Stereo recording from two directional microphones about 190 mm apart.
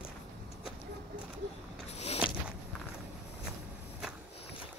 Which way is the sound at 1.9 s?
35° left (ahead or behind).